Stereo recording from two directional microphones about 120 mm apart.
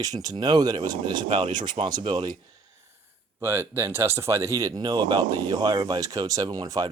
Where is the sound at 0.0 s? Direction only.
30° right (ahead or behind).